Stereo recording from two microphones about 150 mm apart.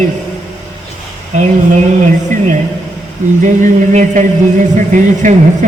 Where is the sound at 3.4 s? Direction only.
55° right (ahead or behind).